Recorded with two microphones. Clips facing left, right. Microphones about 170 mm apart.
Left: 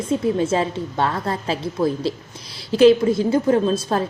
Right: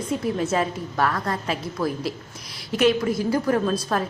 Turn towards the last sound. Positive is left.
turn(degrees=25)  # may be behind; listen again after turning